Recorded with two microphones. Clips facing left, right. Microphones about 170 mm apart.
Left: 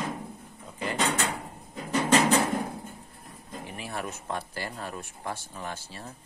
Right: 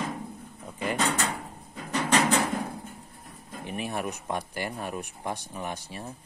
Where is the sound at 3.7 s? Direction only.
20° right (ahead or behind).